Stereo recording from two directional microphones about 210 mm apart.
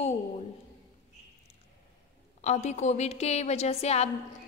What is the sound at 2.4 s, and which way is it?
A woman's voice, 30° left (ahead or behind).